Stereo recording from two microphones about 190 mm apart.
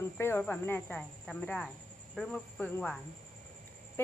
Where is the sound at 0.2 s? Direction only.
10° left (ahead or behind).